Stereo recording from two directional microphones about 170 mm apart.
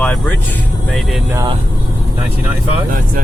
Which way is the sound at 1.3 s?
20° right (ahead or behind).